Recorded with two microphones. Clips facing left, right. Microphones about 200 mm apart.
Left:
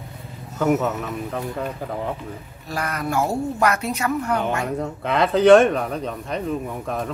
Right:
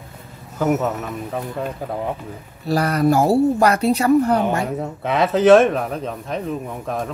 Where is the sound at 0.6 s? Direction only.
5° right (ahead or behind).